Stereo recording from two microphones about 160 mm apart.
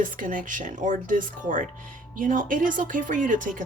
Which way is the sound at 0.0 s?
55° right (ahead or behind).